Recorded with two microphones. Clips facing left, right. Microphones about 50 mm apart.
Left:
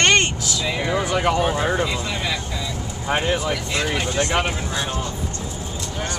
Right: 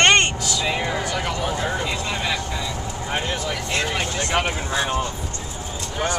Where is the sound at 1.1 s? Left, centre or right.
Centre.